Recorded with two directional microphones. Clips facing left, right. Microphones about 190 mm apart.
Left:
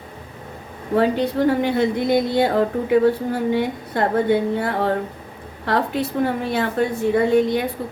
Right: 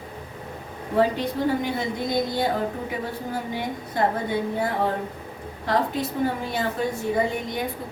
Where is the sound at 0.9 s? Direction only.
65° left (ahead or behind).